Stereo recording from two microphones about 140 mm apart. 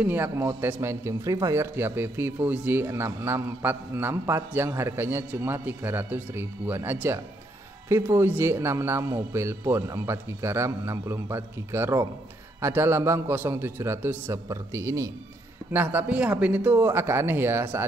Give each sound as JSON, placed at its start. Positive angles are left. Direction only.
{"t": 0.0, "sound": "a man's voice", "side_deg": -15}